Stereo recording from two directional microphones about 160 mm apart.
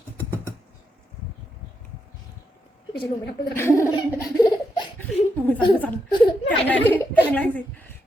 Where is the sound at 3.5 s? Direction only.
15° left (ahead or behind).